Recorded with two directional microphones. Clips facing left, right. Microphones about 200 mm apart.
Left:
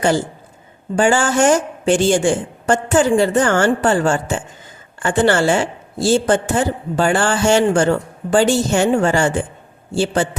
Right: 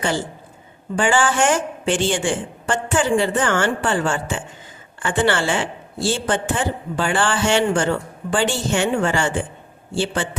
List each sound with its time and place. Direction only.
0.9 s a woman's voice: 40° left (ahead or behind)